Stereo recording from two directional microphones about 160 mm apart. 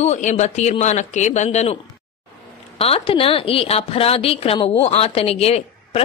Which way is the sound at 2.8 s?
35° left (ahead or behind).